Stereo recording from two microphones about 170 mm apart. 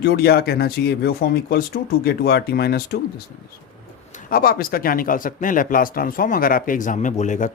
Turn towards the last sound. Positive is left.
turn(degrees=45)  # may be behind; listen again after turning